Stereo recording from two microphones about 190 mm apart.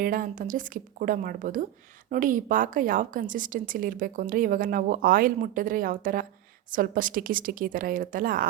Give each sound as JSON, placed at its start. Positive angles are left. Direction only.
{"t": 0.0, "sound": "a woman's voice", "side_deg": -45}